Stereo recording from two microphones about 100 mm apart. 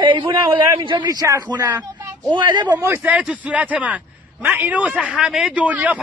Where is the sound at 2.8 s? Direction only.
25° right (ahead or behind).